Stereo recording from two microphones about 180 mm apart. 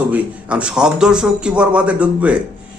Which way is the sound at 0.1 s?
5° right (ahead or behind).